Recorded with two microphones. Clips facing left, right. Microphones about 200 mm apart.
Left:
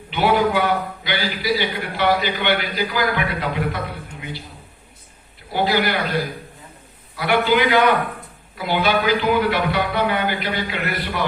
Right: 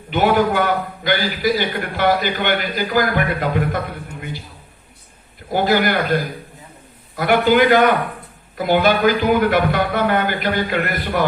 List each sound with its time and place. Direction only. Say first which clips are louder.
0.1 s a man's voice: right 2 dB; 50° right (ahead or behind)
5.5 s a man's voice: right 3 dB; 45° right (ahead or behind)